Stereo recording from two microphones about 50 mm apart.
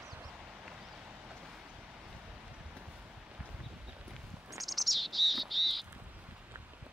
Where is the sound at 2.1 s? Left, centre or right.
Right.